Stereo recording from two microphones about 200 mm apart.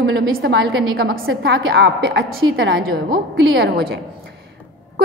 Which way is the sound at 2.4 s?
75° right (ahead or behind).